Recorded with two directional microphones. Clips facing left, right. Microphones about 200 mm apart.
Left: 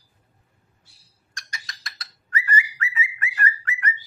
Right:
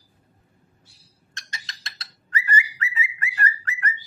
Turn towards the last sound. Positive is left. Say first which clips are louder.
# even
turn(degrees=-35)  # may be behind; listen again after turning